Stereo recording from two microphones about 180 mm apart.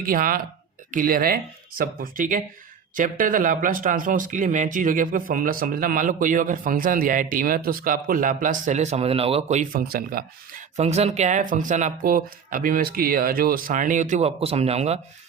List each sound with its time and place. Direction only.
0.0 s speech: 50° right (ahead or behind)
10.8 s speech: 40° right (ahead or behind)